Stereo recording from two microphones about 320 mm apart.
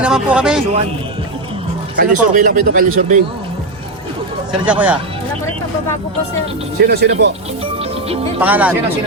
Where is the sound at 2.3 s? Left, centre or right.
Right.